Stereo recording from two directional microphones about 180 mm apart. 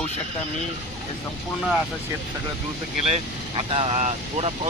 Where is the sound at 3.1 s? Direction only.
30° right (ahead or behind).